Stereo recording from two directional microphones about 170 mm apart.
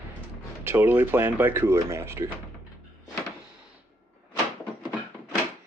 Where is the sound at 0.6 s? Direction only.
10° right (ahead or behind).